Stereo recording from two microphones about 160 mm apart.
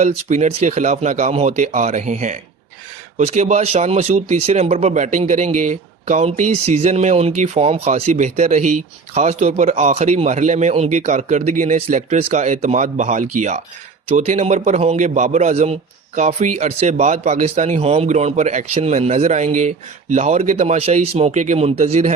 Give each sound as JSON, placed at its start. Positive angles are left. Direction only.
{"t": 0.0, "sound": "a man's voice", "side_deg": -45}